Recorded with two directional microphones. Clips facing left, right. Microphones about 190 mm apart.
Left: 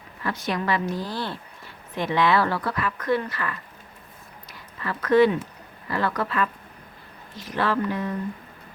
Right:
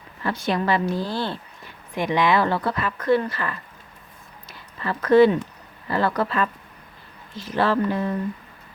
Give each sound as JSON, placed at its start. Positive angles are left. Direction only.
{"t": 0.2, "sound": "speech", "side_deg": -30}
{"t": 2.0, "sound": "a woman's voice", "side_deg": -15}
{"t": 4.4, "sound": "a sound", "side_deg": -30}
{"t": 5.9, "sound": "a woman's voice", "side_deg": -30}